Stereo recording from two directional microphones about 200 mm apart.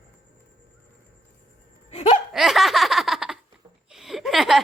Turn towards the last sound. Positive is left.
turn(degrees=0)  # may be behind; listen again after turning